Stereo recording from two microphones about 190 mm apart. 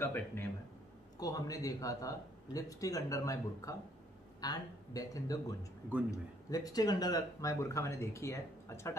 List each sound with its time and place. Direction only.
0.0 s speech: 10° left (ahead or behind)